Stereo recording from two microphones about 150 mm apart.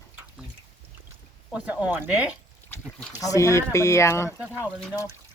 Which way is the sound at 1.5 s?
10° right (ahead or behind).